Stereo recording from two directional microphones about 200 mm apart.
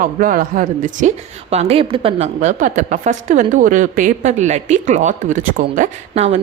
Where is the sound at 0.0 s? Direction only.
40° right (ahead or behind).